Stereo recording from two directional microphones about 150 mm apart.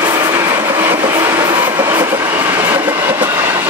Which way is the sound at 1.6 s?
15° right (ahead or behind).